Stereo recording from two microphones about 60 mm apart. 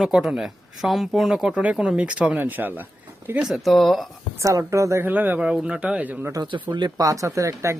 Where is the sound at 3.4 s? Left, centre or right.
Centre.